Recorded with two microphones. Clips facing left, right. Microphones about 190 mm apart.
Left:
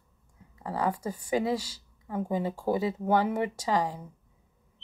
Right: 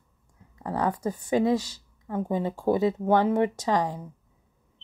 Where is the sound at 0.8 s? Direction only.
10° left (ahead or behind).